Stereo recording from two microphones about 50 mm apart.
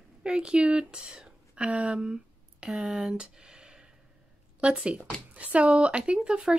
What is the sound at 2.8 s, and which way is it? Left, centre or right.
Speech, centre.